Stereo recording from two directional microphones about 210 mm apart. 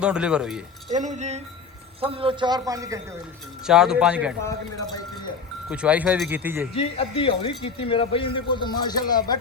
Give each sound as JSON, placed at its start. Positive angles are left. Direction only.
{"t": 0.0, "sound": "speech", "side_deg": -5}
{"t": 0.9, "sound": "a man's voice", "side_deg": -35}
{"t": 3.7, "sound": "speech", "side_deg": -5}
{"t": 4.4, "sound": "speech", "side_deg": 15}
{"t": 5.6, "sound": "speech", "side_deg": -5}
{"t": 6.7, "sound": "a man's voice", "side_deg": 25}